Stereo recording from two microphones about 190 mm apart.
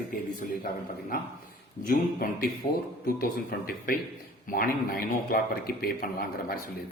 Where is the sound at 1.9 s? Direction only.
50° left (ahead or behind).